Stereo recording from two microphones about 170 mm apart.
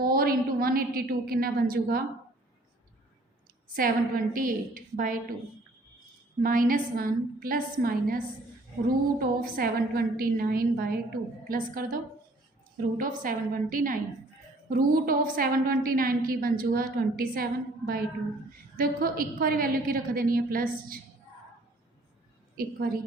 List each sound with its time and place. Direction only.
0.0 s a woman's voice: 60° right (ahead or behind)
3.8 s a woman's voice: 55° right (ahead or behind)
6.4 s a woman's voice: 55° right (ahead or behind)
13.0 s a woman's voice: 55° right (ahead or behind)